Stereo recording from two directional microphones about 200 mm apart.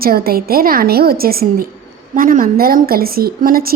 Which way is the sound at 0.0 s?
50° right (ahead or behind).